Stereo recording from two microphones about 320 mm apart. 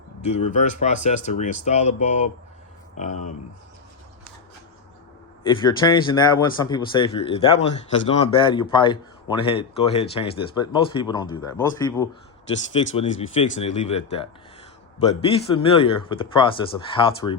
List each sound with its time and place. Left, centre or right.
0.3 s speech: left
5.5 s speech: centre